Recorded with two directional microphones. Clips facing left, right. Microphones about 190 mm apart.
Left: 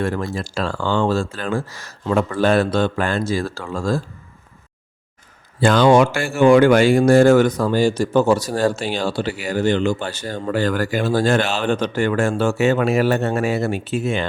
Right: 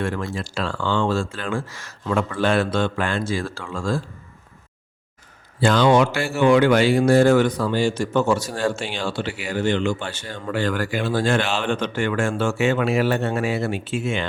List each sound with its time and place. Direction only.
0.0 s speech: 40° left (ahead or behind)
5.5 s speech: 50° left (ahead or behind)